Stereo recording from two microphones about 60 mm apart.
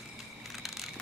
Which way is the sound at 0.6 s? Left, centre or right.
Centre.